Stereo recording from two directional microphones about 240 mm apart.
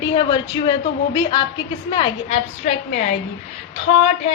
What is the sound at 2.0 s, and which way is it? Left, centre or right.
A woman's voice, left.